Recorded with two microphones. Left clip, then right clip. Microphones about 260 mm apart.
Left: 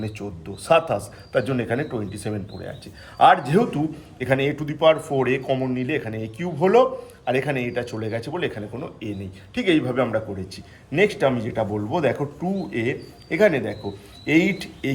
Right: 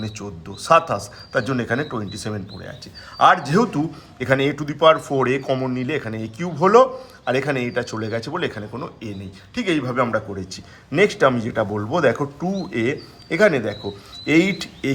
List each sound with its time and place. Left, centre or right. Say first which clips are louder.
0.2 s a man's voice: right 1 dB; centre